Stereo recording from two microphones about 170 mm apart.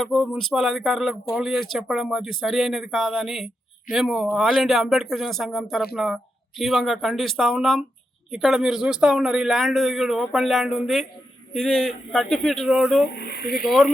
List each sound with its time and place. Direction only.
0.0 s speech: 5° left (ahead or behind)
12.6 s speech: 10° right (ahead or behind)
13.1 s speech: 70° left (ahead or behind)